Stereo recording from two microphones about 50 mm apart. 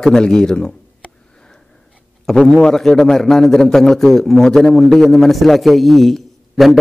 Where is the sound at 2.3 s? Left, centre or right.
Centre.